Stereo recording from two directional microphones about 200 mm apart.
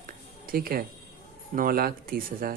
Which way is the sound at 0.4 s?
50° right (ahead or behind).